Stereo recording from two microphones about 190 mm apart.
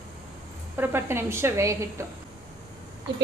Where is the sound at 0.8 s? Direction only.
10° right (ahead or behind).